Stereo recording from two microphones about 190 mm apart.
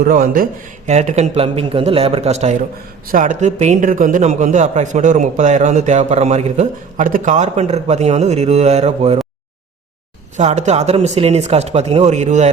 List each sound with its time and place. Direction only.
0.0 s speech: 50° right (ahead or behind)
0.9 s a man's voice: 35° right (ahead or behind)
10.3 s a man's voice: 35° right (ahead or behind)